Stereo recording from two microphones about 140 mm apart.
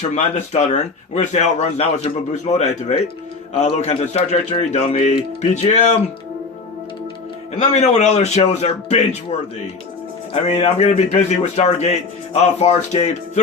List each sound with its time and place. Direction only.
0.1 s a man's voice: 55° left (ahead or behind)
7.7 s a man's voice: 50° left (ahead or behind)
10.3 s a man's voice: 45° left (ahead or behind)